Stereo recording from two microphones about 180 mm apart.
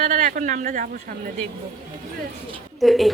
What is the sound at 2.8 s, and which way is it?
Speech, centre (ahead or behind).